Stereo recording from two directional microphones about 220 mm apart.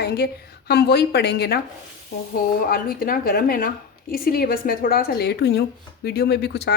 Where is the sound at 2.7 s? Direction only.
40° left (ahead or behind).